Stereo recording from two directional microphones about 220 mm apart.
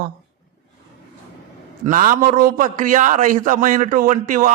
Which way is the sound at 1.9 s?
35° right (ahead or behind).